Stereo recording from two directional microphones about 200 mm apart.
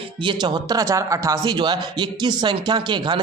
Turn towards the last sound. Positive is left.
turn(degrees=-20)  # may be behind; listen again after turning